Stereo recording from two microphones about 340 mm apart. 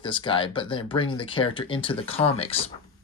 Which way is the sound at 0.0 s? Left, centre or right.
Centre.